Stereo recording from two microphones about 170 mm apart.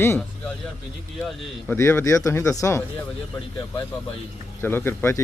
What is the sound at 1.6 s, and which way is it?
A man's voice, 10° left (ahead or behind).